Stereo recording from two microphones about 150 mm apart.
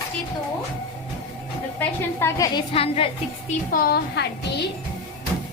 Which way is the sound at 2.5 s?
40° left (ahead or behind).